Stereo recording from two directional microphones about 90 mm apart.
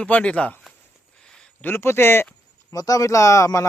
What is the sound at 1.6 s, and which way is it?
Speech, 25° left (ahead or behind).